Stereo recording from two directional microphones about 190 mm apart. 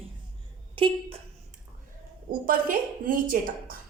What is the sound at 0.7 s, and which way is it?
Speech, 30° right (ahead or behind).